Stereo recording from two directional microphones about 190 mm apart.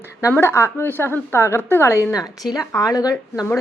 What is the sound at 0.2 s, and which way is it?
A woman's voice, 15° left (ahead or behind).